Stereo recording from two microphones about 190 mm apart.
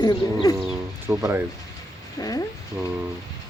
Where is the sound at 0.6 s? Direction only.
10° right (ahead or behind).